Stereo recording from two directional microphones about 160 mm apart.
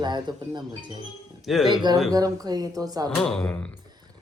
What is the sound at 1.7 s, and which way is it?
Speech, 25° right (ahead or behind).